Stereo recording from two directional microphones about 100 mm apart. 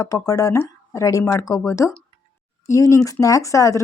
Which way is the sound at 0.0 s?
35° left (ahead or behind).